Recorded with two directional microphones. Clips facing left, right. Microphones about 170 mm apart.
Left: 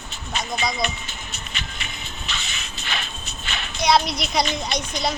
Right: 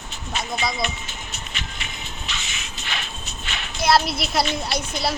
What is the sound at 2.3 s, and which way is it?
Shuffle, 35° left (ahead or behind).